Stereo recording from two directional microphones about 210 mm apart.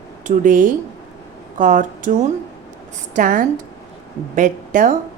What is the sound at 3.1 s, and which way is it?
A woman's voice, 40° right (ahead or behind).